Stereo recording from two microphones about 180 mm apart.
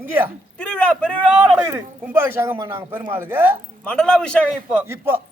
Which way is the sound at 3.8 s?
5° left (ahead or behind).